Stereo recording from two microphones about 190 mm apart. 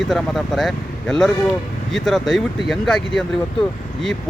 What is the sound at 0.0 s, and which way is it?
Speech, centre (ahead or behind).